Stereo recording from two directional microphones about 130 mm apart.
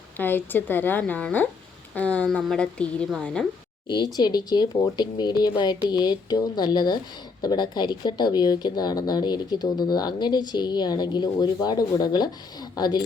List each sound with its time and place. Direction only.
0.2 s a woman's voice: 15° left (ahead or behind)
3.8 s a woman's voice: 35° left (ahead or behind)